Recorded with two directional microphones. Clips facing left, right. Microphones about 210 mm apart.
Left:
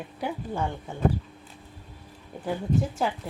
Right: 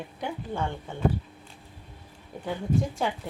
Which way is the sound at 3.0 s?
Centre (ahead or behind).